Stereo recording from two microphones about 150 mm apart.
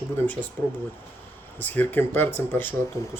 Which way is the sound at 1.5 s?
10° left (ahead or behind).